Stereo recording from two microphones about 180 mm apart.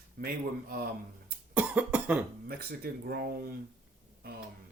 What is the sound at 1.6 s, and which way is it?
Cough, 10° right (ahead or behind).